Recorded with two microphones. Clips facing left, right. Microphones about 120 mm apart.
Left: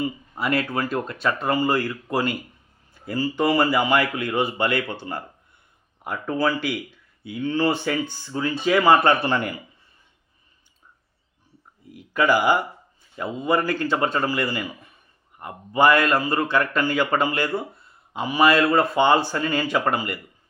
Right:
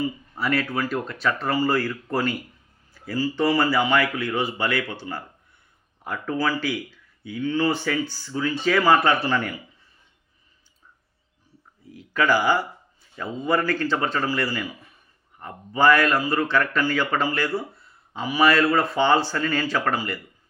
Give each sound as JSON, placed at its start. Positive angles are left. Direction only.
{"t": 0.0, "sound": "speech", "side_deg": 20}
{"t": 6.1, "sound": "speech", "side_deg": 25}
{"t": 11.9, "sound": "speech", "side_deg": 15}